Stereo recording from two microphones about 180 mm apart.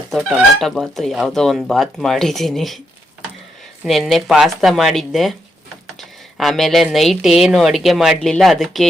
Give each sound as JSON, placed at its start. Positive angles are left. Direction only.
{"t": 0.1, "sound": "speech", "side_deg": 0}
{"t": 3.8, "sound": "speech", "side_deg": 0}